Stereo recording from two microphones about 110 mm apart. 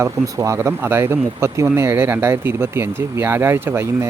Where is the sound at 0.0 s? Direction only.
25° right (ahead or behind).